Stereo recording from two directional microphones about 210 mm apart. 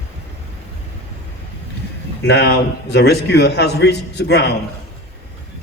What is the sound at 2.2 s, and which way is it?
A man's voice, 50° left (ahead or behind).